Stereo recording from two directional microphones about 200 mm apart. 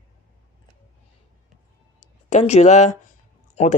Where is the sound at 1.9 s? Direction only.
35° left (ahead or behind).